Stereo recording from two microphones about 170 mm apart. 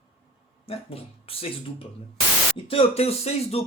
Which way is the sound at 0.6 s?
35° left (ahead or behind).